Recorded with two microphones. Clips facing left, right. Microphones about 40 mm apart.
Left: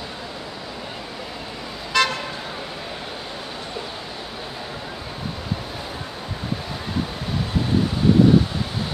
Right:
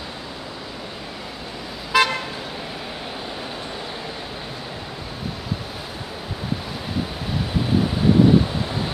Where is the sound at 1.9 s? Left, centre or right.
Centre.